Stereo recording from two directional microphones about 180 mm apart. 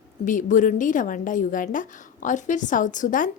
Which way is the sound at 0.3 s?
45° left (ahead or behind).